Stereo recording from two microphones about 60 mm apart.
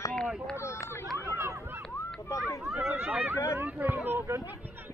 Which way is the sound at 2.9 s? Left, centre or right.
Right.